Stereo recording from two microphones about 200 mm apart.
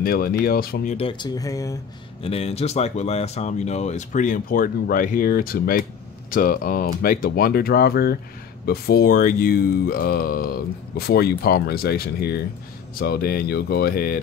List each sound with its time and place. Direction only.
0.0 s speech: 50° left (ahead or behind)
0.9 s speech: 25° left (ahead or behind)
2.2 s speech: 30° left (ahead or behind); by 14.1 s 50° left (ahead or behind)